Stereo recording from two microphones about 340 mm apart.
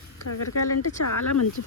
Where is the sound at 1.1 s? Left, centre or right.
Left.